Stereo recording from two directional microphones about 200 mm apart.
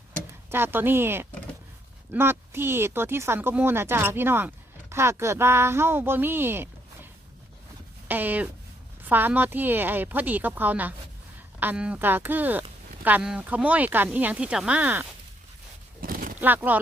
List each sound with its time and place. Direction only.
0.5 s speech: 10° right (ahead or behind)
16.0 s a sound: 45° right (ahead or behind)
16.4 s speech: 10° right (ahead or behind)